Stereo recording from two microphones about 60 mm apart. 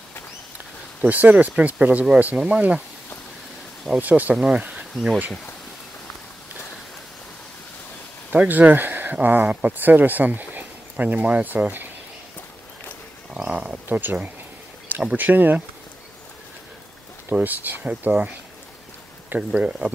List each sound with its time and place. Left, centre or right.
1.0 s speech: right
4.0 s speech: right
4.6 s insect: centre
4.9 s speech: centre
8.3 s speech: right
13.3 s speech: centre
13.8 s speech: right
15.1 s speech: right
17.3 s speech: right